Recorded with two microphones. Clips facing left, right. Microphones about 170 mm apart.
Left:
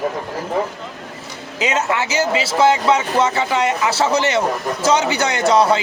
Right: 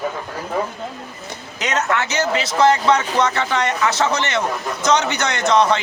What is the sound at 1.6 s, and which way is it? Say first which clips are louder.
A man's voice: left 1 dB; 10° left (ahead or behind).